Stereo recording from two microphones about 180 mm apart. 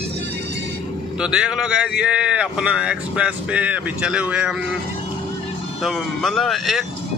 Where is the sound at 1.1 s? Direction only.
5° right (ahead or behind).